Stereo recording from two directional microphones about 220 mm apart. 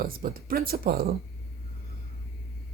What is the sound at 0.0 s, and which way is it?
Speech, 40° right (ahead or behind).